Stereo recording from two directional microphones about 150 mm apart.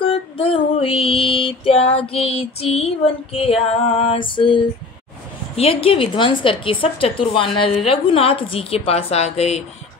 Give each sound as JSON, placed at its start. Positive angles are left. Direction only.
{"t": 0.1, "sound": "female singing", "side_deg": 40}
{"t": 2.1, "sound": "a woman's voice", "side_deg": 40}
{"t": 5.6, "sound": "a woman's voice", "side_deg": 40}